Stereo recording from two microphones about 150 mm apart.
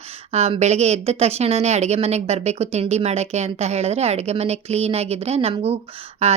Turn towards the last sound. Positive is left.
turn(degrees=-45)  # may be behind; listen again after turning